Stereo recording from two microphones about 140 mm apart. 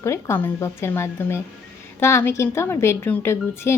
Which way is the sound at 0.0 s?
20° left (ahead or behind).